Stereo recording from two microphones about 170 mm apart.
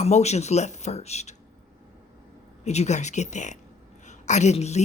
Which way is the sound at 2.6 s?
40° left (ahead or behind).